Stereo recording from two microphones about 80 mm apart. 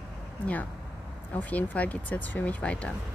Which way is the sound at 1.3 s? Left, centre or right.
Centre.